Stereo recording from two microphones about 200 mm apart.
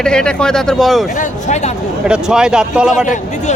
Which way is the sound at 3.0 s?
40° left (ahead or behind).